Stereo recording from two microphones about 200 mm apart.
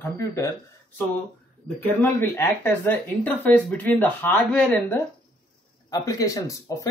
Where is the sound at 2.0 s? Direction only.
10° left (ahead or behind).